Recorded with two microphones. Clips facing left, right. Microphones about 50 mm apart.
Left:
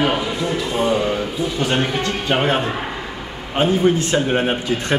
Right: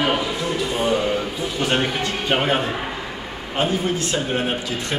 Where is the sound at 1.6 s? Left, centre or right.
Centre.